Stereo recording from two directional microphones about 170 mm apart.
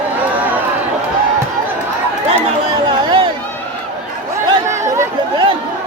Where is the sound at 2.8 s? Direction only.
30° right (ahead or behind).